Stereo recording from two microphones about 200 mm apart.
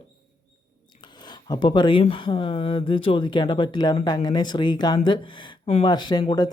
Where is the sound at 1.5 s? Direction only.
20° left (ahead or behind).